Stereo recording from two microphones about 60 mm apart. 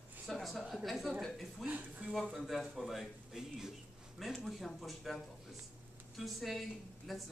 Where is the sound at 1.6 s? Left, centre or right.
Right.